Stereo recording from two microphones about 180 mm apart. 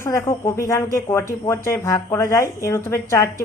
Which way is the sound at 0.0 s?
15° left (ahead or behind).